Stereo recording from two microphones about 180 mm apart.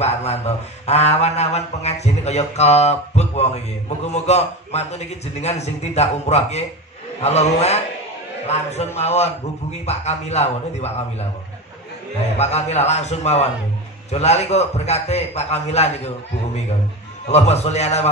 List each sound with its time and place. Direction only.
0.0 s a man's voice: 35° left (ahead or behind)
12.4 s a man's voice: 35° left (ahead or behind)
17.3 s a man's voice: 35° left (ahead or behind)